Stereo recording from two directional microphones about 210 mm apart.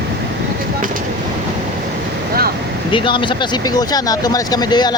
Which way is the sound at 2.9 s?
25° left (ahead or behind).